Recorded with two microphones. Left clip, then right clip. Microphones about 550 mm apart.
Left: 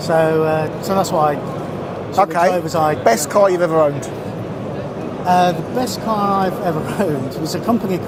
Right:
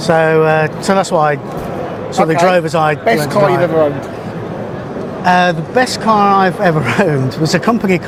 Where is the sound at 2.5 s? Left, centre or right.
Right.